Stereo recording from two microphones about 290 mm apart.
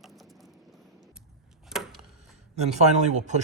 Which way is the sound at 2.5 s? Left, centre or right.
Right.